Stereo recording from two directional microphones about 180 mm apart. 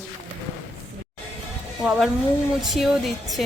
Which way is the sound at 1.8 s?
Centre (ahead or behind).